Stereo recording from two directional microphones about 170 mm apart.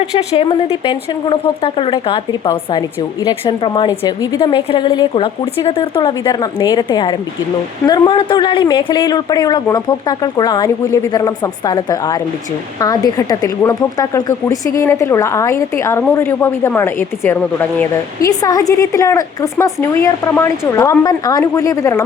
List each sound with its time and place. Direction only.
0.0 s speech: 40° left (ahead or behind)
3.4 s a woman's voice: 30° left (ahead or behind)